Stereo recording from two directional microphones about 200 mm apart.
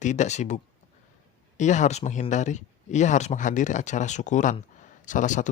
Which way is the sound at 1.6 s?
35° left (ahead or behind).